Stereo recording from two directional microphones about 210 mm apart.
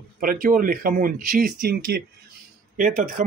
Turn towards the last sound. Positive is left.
turn(degrees=-40)  # may be behind; listen again after turning